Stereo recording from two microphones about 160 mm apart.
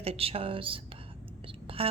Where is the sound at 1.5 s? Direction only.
35° right (ahead or behind).